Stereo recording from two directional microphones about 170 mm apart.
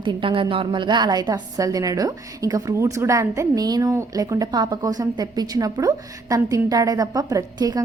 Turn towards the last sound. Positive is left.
turn(degrees=-20)  # may be behind; listen again after turning